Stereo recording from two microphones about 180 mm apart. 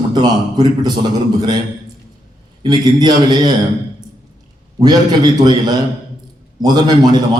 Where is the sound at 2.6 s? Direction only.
25° right (ahead or behind).